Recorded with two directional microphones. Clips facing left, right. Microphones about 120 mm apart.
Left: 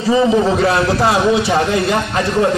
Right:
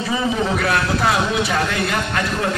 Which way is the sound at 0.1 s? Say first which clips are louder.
Left 9 dB; 30° left (ahead or behind).